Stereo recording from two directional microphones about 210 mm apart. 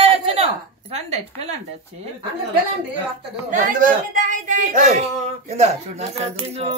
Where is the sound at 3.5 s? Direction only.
40° right (ahead or behind).